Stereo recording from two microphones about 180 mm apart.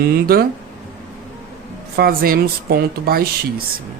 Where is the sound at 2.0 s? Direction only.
55° right (ahead or behind).